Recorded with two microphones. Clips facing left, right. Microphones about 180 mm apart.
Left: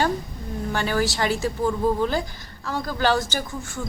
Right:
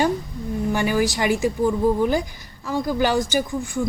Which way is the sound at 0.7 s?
15° right (ahead or behind).